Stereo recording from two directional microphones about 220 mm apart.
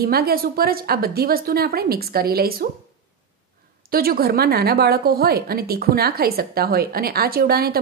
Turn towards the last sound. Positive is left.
turn(degrees=-45)  # may be behind; listen again after turning